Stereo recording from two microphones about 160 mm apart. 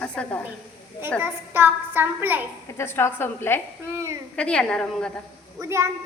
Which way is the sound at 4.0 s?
20° right (ahead or behind).